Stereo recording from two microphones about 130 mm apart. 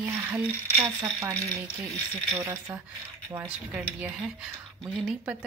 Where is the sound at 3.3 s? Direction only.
15° right (ahead or behind).